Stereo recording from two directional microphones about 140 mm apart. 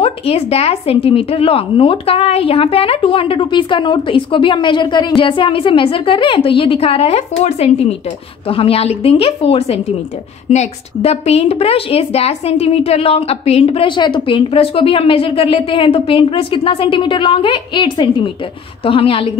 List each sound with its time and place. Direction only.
0.0 s a woman's voice: 45° left (ahead or behind)